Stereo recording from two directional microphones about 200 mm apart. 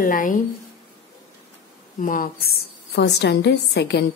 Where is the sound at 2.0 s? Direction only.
45° left (ahead or behind).